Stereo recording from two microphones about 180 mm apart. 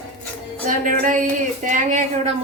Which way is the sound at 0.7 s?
45° right (ahead or behind).